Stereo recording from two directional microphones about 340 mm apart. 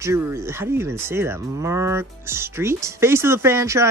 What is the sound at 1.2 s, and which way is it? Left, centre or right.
Speech, centre.